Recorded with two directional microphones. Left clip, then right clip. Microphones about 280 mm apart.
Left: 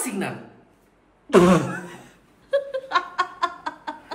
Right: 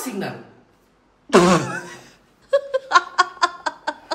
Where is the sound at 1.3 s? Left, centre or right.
Centre.